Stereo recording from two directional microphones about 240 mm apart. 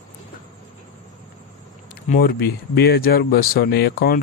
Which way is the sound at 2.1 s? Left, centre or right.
Left.